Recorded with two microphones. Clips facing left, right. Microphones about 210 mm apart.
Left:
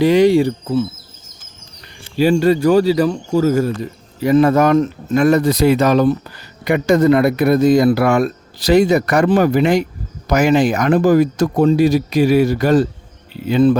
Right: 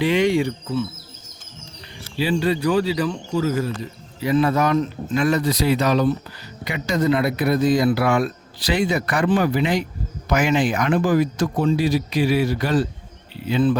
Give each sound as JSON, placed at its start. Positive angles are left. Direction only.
{"t": 0.0, "sound": "speech", "side_deg": 40}
{"t": 2.1, "sound": "speech", "side_deg": 45}